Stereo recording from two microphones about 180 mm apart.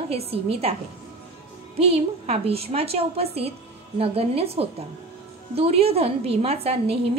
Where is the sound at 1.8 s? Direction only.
35° right (ahead or behind).